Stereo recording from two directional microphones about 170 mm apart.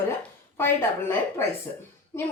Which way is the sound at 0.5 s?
15° left (ahead or behind).